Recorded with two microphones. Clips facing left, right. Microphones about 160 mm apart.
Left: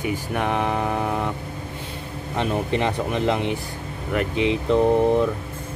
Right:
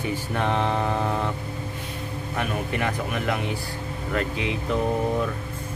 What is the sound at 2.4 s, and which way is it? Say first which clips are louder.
Speech: left 5 dB; 25° left (ahead or behind).